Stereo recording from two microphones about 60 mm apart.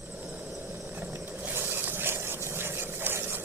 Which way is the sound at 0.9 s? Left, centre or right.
Right.